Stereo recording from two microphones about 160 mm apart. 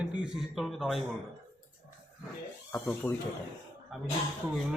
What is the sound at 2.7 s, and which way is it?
Speech, 10° left (ahead or behind).